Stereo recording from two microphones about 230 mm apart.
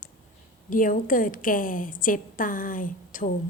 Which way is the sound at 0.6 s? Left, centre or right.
Left.